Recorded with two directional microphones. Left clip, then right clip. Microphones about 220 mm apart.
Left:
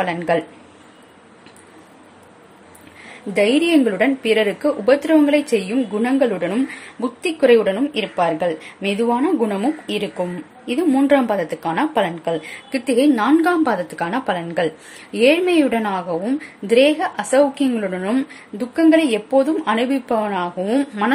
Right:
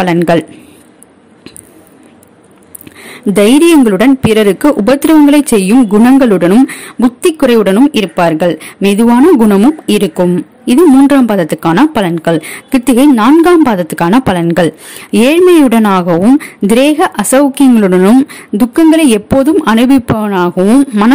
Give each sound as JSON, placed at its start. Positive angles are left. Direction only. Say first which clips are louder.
{"t": 0.0, "sound": "a woman's voice", "louder": "right 10 dB", "side_deg": -45}
{"t": 3.3, "sound": "a woman's voice", "louder": "right 10 dB", "side_deg": -45}